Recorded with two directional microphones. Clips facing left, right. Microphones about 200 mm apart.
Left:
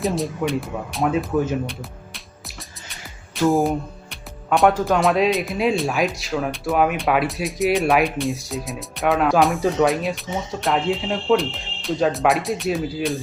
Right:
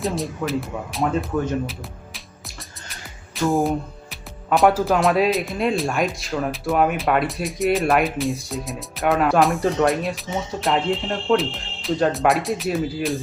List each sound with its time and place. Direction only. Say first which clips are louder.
0.0 s speech: left 2 dB; centre (ahead or behind)